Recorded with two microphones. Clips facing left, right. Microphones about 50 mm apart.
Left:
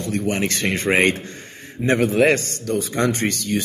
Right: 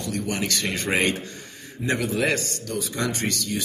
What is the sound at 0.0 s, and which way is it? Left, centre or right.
A man's voice, left.